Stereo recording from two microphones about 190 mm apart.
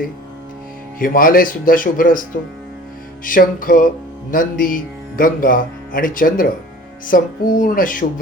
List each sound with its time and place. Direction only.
0.9 s speech: 45° left (ahead or behind)
3.2 s speech: 45° left (ahead or behind)